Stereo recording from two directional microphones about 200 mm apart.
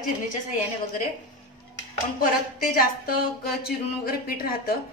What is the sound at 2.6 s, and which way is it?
Speech, 45° left (ahead or behind).